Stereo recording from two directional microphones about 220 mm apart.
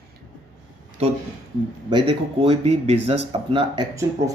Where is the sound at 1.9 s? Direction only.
20° right (ahead or behind).